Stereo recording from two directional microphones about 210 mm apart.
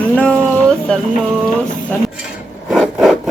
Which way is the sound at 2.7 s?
Centre (ahead or behind).